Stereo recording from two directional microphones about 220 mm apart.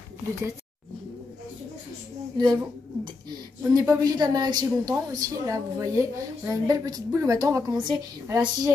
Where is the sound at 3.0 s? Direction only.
20° right (ahead or behind).